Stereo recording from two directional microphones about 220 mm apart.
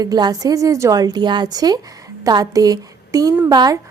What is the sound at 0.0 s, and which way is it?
A woman's voice, 15° right (ahead or behind).